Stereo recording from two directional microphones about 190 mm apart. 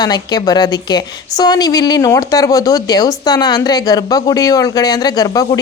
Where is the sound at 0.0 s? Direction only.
20° left (ahead or behind).